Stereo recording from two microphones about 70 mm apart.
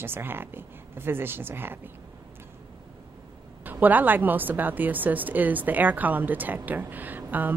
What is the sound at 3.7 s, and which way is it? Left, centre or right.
A woman's voice, right.